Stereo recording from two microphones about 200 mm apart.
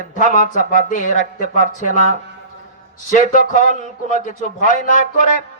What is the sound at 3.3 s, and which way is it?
A man's voice, 40° left (ahead or behind).